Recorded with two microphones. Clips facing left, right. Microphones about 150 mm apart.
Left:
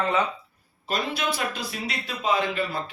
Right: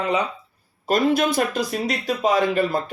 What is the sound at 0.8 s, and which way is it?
Speech, 45° right (ahead or behind).